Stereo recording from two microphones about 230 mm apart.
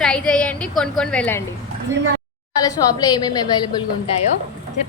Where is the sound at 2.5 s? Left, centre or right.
Centre.